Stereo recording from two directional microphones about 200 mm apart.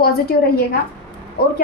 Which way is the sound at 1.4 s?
50° left (ahead or behind).